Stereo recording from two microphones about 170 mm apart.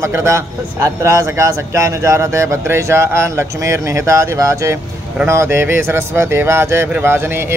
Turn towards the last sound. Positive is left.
turn(degrees=-15)  # may be behind; listen again after turning